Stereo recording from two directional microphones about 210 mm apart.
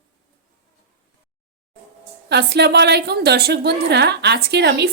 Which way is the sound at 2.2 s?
55° right (ahead or behind).